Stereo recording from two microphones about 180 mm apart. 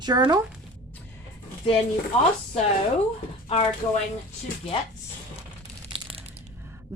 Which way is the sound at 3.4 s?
35° left (ahead or behind).